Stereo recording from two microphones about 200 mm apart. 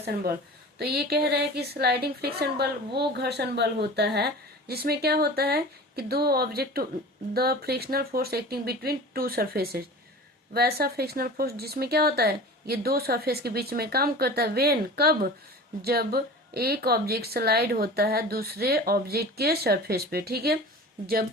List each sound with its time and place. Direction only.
0.8 s a woman's voice: 50° right (ahead or behind)